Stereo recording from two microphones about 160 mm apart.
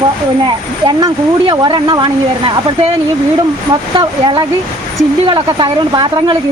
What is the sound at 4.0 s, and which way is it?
Speech, 30° right (ahead or behind).